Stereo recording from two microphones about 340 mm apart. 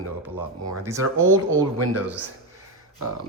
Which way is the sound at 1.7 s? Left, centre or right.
Right.